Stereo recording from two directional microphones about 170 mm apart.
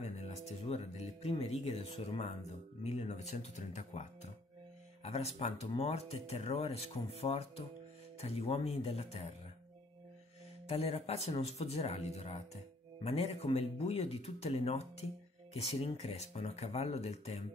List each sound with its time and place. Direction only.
0.0 s speech: 40° left (ahead or behind)
10.7 s speech: 35° left (ahead or behind)